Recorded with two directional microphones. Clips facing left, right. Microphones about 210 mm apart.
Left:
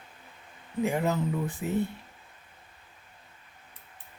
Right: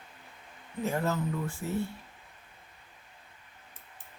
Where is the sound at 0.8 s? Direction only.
15° left (ahead or behind).